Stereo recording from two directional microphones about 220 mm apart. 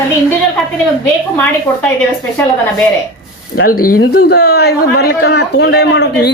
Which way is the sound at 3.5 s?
40° left (ahead or behind).